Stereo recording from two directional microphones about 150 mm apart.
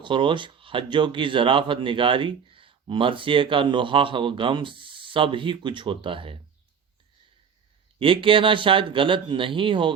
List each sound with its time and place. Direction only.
0.0 s speech: 35° right (ahead or behind)
7.9 s speech: 35° right (ahead or behind)